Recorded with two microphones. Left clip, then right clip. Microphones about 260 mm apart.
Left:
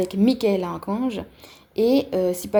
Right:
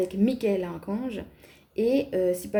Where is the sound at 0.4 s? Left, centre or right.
Left.